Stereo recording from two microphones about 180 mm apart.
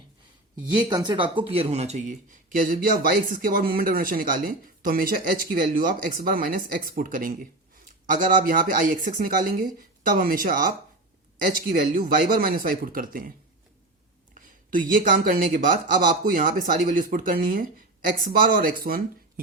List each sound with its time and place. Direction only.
0.6 s speech: 25° right (ahead or behind)
2.6 s speech: 50° right (ahead or behind)
14.3 s speech: 50° right (ahead or behind)